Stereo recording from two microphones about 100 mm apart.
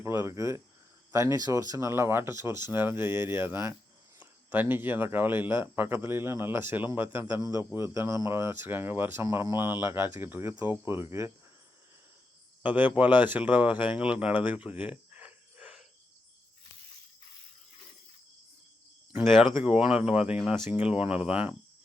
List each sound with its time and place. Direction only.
0.0 s speech: 25° right (ahead or behind)
1.4 s speech: 40° right (ahead or behind)
12.6 s speech: 15° right (ahead or behind)
19.2 s speech: 5° right (ahead or behind)